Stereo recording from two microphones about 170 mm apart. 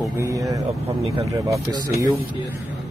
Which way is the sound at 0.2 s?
20° right (ahead or behind).